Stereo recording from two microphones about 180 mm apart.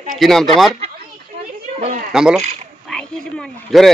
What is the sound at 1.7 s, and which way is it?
Speech, 40° right (ahead or behind).